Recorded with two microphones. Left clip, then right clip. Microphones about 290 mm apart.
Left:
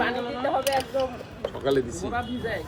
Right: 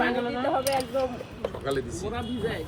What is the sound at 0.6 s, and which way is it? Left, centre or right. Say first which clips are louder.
Mechanisms: left 1 dB; right.